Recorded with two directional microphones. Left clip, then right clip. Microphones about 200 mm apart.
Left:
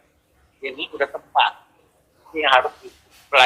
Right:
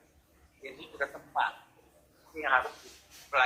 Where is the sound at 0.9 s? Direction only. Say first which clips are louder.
Left 12 dB; 40° left (ahead or behind).